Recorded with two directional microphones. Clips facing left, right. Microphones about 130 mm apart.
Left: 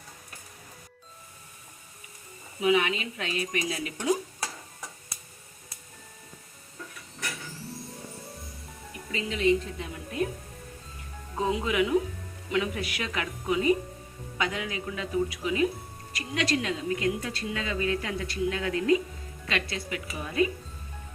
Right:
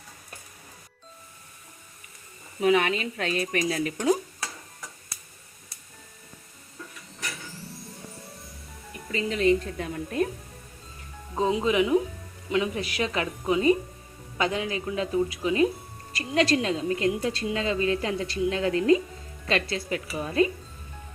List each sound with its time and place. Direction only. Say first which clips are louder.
2.6 s speech: right 2 dB; 45° right (ahead or behind)
7.5 s music: left 2 dB; centre (ahead or behind)
9.1 s speech: right 2 dB; 45° right (ahead or behind)
11.3 s a woman's voice: right 3 dB; 25° right (ahead or behind)